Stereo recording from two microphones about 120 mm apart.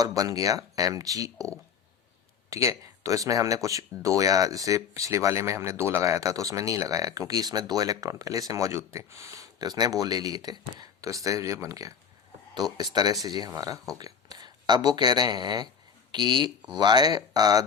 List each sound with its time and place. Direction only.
0.0 s speech: 30° right (ahead or behind)
2.5 s speech: 25° right (ahead or behind)